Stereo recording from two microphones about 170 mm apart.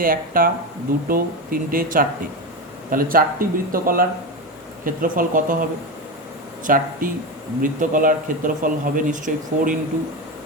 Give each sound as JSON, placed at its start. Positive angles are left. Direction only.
{"t": 0.0, "sound": "speech", "side_deg": -55}
{"t": 6.7, "sound": "speech", "side_deg": -55}